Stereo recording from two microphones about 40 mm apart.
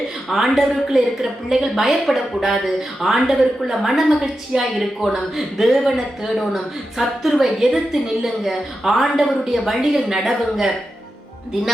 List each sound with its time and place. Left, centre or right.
0.3 s a woman's voice: centre
4.5 s speech: right
5.6 s speech: centre
7.0 s a woman's voice: centre